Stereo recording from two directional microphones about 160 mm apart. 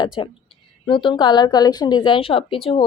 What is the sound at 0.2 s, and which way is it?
A woman's voice, 30° left (ahead or behind).